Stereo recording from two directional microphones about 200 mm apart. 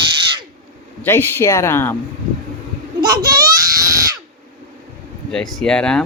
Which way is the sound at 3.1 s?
20° right (ahead or behind).